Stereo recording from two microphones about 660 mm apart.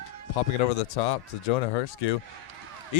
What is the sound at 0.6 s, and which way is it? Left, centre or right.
Speech, left.